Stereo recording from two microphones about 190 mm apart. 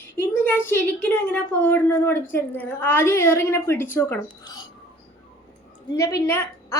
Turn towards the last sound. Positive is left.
turn(degrees=15)  # may be behind; listen again after turning